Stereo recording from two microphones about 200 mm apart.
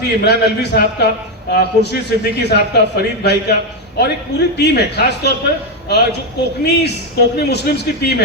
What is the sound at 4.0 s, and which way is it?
A man's voice, 55° left (ahead or behind).